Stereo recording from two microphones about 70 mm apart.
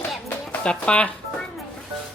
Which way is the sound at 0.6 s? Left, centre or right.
Centre.